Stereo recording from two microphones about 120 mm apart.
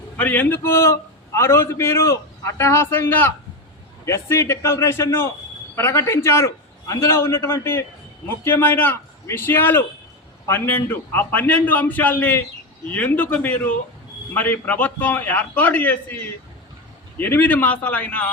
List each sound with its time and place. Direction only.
0.2 s a man's voice: 15° left (ahead or behind)